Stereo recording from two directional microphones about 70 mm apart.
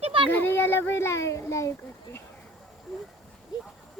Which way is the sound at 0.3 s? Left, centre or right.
Left.